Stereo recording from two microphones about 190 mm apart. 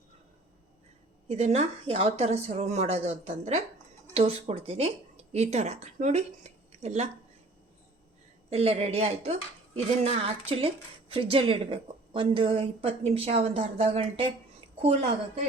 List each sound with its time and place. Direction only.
1.3 s speech: 35° right (ahead or behind)
8.4 s a woman's voice: 30° right (ahead or behind)